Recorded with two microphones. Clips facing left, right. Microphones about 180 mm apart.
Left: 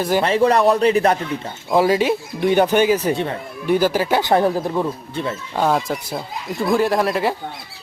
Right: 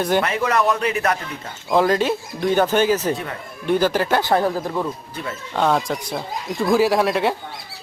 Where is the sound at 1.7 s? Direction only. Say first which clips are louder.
Left 2 dB; 10° left (ahead or behind).